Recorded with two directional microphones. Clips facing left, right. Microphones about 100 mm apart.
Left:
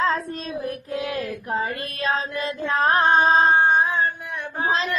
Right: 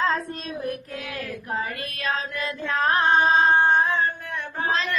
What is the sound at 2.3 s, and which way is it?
Carnatic music, 15° left (ahead or behind).